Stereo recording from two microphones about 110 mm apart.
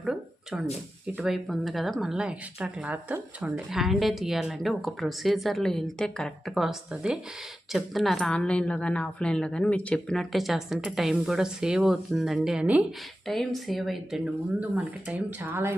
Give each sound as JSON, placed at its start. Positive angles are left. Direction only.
{"t": 0.0, "sound": "a sound", "side_deg": -5}
{"t": 1.0, "sound": "a woman's voice", "side_deg": -5}
{"t": 13.2, "sound": "a woman's voice", "side_deg": 0}
{"t": 14.6, "sound": "speech", "side_deg": -15}